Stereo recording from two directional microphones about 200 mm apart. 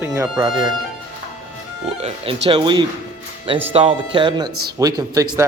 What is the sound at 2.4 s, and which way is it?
Speech, 25° right (ahead or behind).